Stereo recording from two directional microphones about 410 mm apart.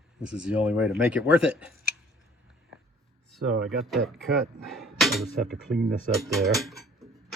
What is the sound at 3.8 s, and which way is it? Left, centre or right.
Speech, centre.